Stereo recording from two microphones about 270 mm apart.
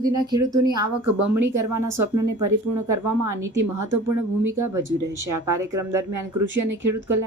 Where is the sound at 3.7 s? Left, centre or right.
Right.